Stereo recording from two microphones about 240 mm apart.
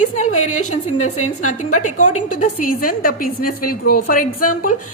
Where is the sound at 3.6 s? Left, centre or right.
Left.